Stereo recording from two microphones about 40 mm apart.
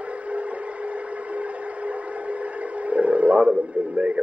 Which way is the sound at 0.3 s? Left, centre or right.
Right.